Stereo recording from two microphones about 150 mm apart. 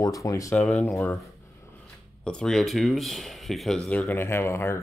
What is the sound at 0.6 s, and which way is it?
Speech, 10° left (ahead or behind).